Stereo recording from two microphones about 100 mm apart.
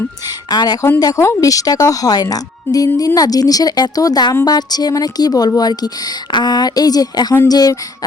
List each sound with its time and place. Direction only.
0.5 s speech: 40° left (ahead or behind)